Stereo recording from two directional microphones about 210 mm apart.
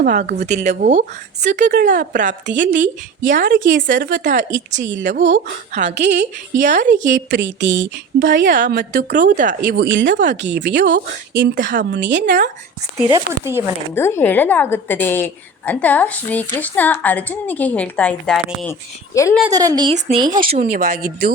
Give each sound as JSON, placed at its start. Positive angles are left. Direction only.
{"t": 0.0, "sound": "speech", "side_deg": -40}
{"t": 4.5, "sound": "speech", "side_deg": -60}
{"t": 5.1, "sound": "speech", "side_deg": -35}
{"t": 5.9, "sound": "speech", "side_deg": -55}
{"t": 6.6, "sound": "speech", "side_deg": -35}
{"t": 6.8, "sound": "speech", "side_deg": -60}
{"t": 8.4, "sound": "speech", "side_deg": -40}
{"t": 9.6, "sound": "speech", "side_deg": -55}
{"t": 13.1, "sound": "speech", "side_deg": -15}
{"t": 13.9, "sound": "a woman's voice", "side_deg": 10}
{"t": 19.4, "sound": "speech", "side_deg": -15}
{"t": 20.6, "sound": "speech", "side_deg": -40}